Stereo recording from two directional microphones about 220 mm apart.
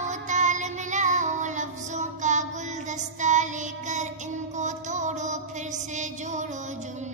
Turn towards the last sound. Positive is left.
turn(degrees=-35)  # may be behind; listen again after turning